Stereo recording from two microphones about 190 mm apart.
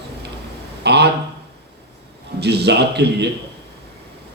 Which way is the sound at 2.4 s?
60° right (ahead or behind).